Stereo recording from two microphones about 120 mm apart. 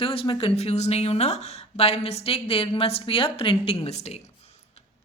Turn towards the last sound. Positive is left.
turn(degrees=60)  # may be behind; listen again after turning